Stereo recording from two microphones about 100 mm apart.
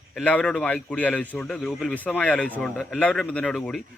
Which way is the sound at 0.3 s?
10° left (ahead or behind).